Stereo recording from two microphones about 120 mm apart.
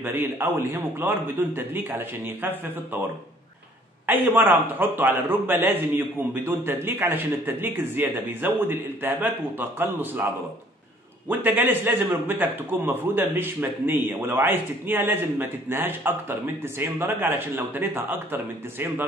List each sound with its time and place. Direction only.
0.0 s a man's voice: 20° right (ahead or behind)
11.2 s a man's voice: 15° right (ahead or behind)